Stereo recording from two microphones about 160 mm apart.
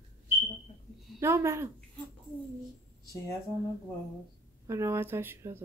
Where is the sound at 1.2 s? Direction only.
15° right (ahead or behind).